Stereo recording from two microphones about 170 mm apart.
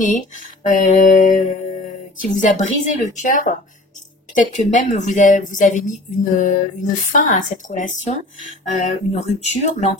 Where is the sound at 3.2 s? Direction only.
50° left (ahead or behind).